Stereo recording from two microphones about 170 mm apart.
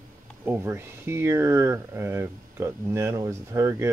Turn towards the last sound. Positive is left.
turn(degrees=-15)  # may be behind; listen again after turning